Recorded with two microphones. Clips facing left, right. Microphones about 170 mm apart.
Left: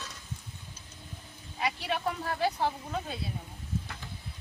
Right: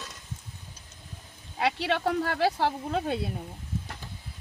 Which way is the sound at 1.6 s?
80° right.